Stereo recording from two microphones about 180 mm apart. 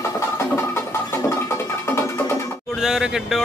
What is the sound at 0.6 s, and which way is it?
Music, 15° left (ahead or behind).